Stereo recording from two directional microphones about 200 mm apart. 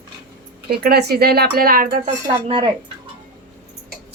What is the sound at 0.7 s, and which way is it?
Speech, 50° right (ahead or behind).